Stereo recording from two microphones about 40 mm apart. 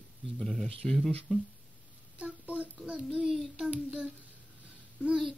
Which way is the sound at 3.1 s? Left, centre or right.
Centre.